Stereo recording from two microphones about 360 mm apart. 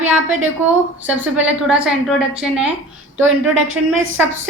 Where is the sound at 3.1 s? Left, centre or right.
Right.